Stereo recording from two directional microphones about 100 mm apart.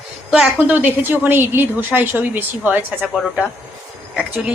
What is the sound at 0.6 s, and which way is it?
A woman's voice, 15° right (ahead or behind).